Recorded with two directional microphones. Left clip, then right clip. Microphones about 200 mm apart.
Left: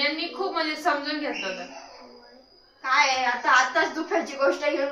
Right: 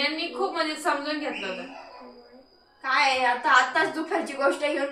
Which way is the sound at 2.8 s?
25° right (ahead or behind).